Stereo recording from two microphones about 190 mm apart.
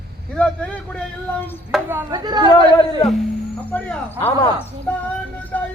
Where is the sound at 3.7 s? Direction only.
10° left (ahead or behind).